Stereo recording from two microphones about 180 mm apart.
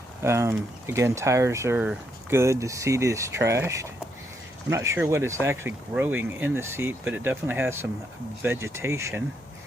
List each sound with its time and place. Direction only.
0.2 s speech: 15° right (ahead or behind)